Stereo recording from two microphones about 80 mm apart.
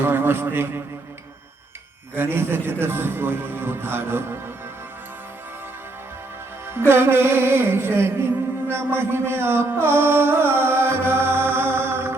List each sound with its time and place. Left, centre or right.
0.0 s a man's voice: right
2.1 s a man's voice: right
6.7 s music: right